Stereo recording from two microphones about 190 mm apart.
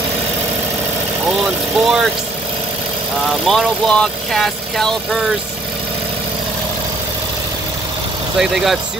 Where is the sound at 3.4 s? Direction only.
5° left (ahead or behind).